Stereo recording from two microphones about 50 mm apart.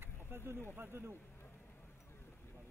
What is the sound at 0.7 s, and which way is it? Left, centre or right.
Speech, right.